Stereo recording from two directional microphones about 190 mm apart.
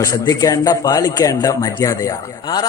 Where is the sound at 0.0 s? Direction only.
20° left (ahead or behind).